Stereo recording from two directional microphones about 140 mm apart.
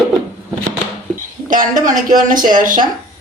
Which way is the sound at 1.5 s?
65° right (ahead or behind).